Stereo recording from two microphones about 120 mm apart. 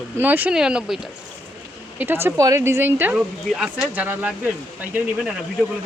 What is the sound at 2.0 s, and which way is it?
A woman's voice, 15° right (ahead or behind).